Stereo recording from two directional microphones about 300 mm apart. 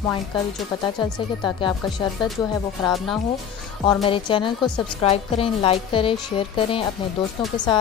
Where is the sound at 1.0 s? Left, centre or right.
Centre.